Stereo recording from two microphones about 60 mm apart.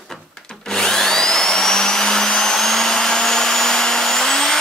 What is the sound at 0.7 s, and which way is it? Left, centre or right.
Vacuum cleaner, centre.